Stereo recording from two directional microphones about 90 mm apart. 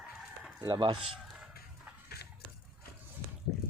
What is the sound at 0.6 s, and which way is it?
Speech, 60° right (ahead or behind).